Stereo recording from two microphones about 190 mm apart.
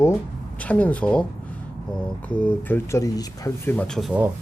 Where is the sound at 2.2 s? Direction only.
10° left (ahead or behind).